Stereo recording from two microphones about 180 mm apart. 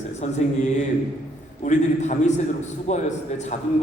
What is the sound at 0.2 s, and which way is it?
A man's voice, 40° left (ahead or behind).